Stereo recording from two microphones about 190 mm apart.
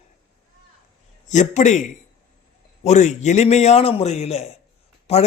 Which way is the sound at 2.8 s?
40° left (ahead or behind).